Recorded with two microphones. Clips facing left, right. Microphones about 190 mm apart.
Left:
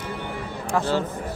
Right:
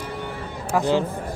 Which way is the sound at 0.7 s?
15° right (ahead or behind).